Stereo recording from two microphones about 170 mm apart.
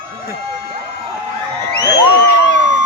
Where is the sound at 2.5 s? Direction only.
90° left.